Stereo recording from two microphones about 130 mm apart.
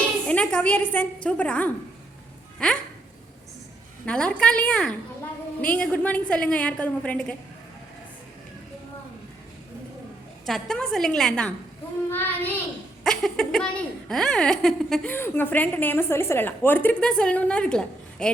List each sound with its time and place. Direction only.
0.3 s a woman's voice: 10° left (ahead or behind)
4.0 s a woman's voice: 10° left (ahead or behind)
10.4 s a woman's voice: 5° left (ahead or behind)
13.1 s a woman's voice: 5° left (ahead or behind)
15.1 s a woman's voice: 15° left (ahead or behind)